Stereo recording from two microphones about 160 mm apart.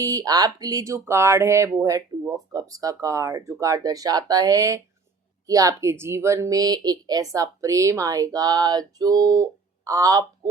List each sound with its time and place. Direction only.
0.0 s a woman's voice: 20° right (ahead or behind)